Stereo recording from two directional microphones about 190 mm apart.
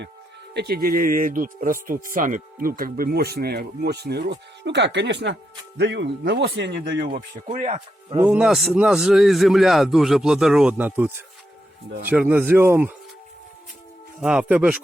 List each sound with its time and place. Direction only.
0.5 s speech: 55° right (ahead or behind)
7.2 s speech: 40° right (ahead or behind)
8.2 s a man's voice: 5° right (ahead or behind)
14.2 s a man's voice: 5° right (ahead or behind)